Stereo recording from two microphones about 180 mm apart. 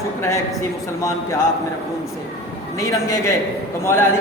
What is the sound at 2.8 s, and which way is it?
Speech, 15° left (ahead or behind).